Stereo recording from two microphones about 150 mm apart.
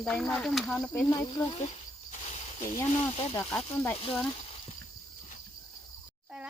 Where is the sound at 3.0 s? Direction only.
40° left (ahead or behind).